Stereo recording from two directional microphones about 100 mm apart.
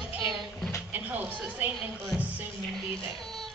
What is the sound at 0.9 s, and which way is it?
Music, 15° right (ahead or behind).